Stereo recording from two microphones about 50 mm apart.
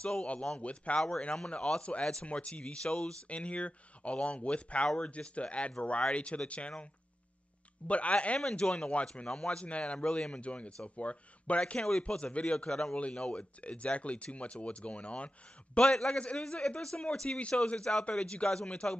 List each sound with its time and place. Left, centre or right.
0.0 s a man's voice: left
7.9 s speech: left
8.4 s speech: centre
15.8 s a man's voice: centre